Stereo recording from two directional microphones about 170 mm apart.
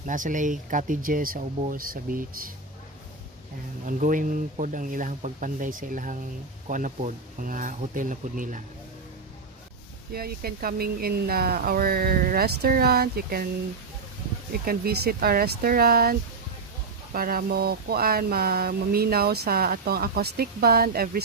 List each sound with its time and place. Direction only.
0.0 s speech: 50° right (ahead or behind)
3.8 s speech: 50° right (ahead or behind)
10.1 s speech: 60° right (ahead or behind)
14.5 s speech: 65° right (ahead or behind)